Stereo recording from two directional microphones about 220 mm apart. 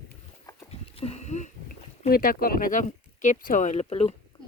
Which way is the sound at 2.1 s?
40° left (ahead or behind).